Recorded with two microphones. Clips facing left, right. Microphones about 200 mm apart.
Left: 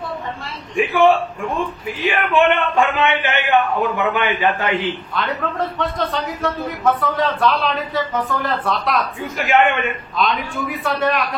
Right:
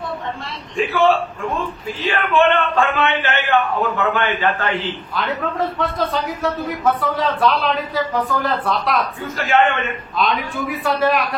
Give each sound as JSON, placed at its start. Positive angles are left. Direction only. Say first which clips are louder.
{"t": 0.7, "sound": "a man's voice", "louder": "left 2 dB", "side_deg": 15}
{"t": 5.1, "sound": "a man's voice", "louder": "even", "side_deg": 0}
{"t": 9.4, "sound": "a man's voice", "louder": "left 1 dB", "side_deg": 15}
{"t": 10.1, "sound": "a man's voice", "louder": "right 1 dB", "side_deg": 0}